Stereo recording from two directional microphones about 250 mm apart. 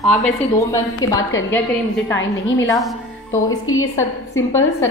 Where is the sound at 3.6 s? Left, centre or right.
Left.